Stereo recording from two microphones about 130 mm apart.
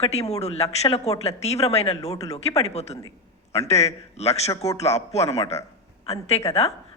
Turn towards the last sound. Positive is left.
turn(degrees=55)  # may be behind; listen again after turning